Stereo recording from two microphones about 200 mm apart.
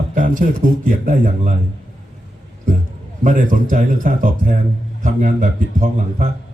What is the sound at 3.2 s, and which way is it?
Speech, 40° right (ahead or behind).